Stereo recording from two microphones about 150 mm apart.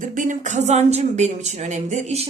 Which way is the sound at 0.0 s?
60° right (ahead or behind).